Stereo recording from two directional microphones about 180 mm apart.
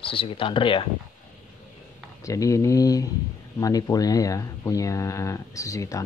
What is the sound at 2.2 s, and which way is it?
Speech, 15° left (ahead or behind).